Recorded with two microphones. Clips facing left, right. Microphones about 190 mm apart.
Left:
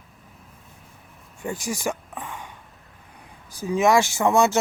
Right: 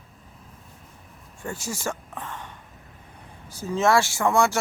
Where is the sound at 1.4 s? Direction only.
15° left (ahead or behind).